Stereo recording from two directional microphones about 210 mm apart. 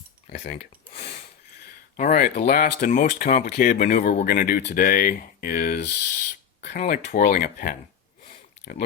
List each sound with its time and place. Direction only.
2.0 s speech: 40° left (ahead or behind)